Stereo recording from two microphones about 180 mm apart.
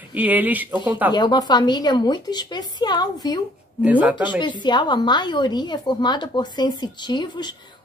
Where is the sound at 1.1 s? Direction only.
25° left (ahead or behind).